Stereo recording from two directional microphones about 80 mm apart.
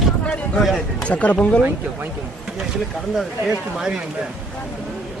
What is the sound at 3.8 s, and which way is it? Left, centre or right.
Speech, centre.